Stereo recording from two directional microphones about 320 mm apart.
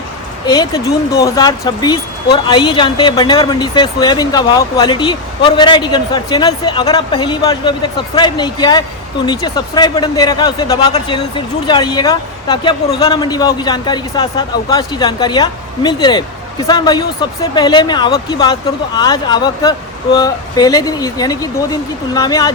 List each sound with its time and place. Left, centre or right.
0.4 s speech: centre